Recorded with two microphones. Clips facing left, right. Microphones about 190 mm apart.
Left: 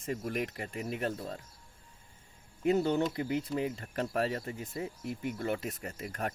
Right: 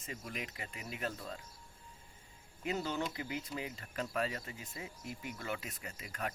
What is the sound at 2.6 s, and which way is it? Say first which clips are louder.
Speech: left 9 dB; 55° left (ahead or behind).